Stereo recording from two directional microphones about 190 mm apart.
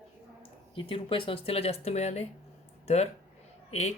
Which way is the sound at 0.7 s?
30° left (ahead or behind).